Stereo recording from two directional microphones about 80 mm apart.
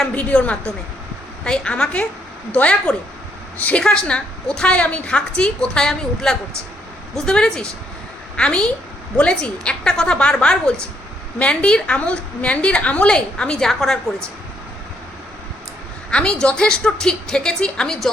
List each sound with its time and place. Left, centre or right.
0.0 s a woman's voice: centre
16.0 s a woman's voice: centre